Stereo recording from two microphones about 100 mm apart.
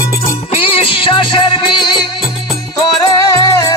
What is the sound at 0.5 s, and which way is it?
Music, 70° left (ahead or behind).